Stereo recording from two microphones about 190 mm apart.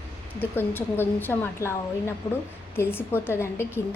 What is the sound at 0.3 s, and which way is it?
A woman's voice, 10° left (ahead or behind).